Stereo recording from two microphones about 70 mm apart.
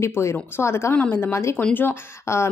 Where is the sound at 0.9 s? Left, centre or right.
Left.